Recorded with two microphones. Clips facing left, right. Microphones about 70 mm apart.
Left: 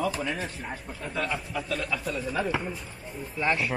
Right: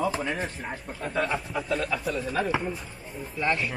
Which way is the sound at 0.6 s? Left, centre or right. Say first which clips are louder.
Right 2 dB; centre.